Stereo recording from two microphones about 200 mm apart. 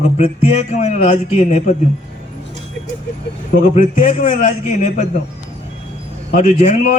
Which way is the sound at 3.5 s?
40° left (ahead or behind).